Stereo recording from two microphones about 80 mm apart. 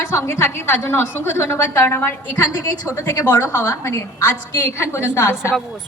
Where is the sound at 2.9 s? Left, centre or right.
Left.